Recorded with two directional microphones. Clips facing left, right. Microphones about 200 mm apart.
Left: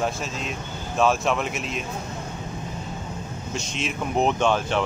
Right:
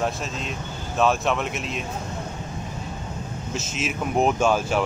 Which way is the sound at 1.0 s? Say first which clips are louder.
Even; centre (ahead or behind).